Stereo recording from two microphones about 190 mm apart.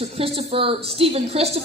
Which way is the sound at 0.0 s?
30° right (ahead or behind).